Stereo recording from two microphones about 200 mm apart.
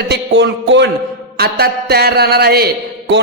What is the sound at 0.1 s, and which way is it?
Speech, 60° right (ahead or behind).